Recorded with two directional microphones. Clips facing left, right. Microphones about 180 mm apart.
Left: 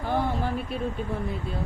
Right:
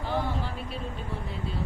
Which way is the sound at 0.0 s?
50° left (ahead or behind).